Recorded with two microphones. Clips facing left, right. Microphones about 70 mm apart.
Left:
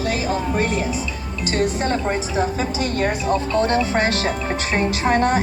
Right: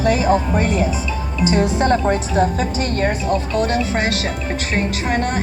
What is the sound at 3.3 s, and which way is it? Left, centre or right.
Speech, left.